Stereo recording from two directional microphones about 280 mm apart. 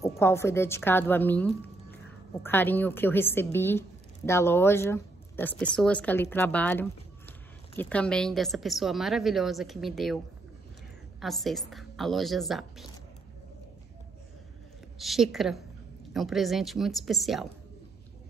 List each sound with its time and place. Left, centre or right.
0.0 s a woman's voice: centre
15.0 s a woman's voice: centre